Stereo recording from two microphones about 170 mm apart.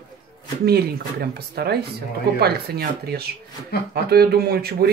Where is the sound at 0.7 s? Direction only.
65° right (ahead or behind).